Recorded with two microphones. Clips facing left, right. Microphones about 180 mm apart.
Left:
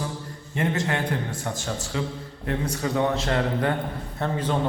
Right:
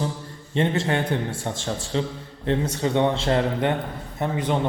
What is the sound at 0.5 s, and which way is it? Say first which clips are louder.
A man's voice: right 3 dB; 25° right (ahead or behind).